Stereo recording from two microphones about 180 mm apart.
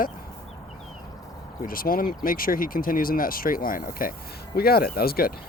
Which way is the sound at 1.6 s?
50° left (ahead or behind).